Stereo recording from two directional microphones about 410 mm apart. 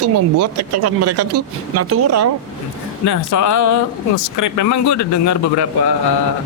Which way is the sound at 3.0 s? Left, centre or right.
Left.